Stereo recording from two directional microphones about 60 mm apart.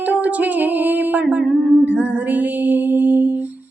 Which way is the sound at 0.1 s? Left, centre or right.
Right.